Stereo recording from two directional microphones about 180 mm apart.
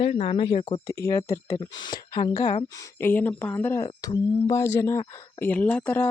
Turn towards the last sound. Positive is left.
turn(degrees=10)  # may be behind; listen again after turning